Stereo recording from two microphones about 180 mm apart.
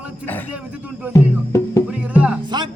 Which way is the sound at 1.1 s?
15° left (ahead or behind).